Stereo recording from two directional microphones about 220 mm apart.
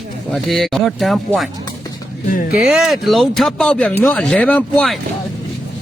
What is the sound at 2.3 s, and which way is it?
Speech, 40° left (ahead or behind).